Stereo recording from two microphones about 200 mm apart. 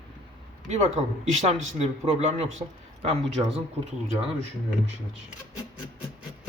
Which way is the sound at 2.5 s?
30° right (ahead or behind).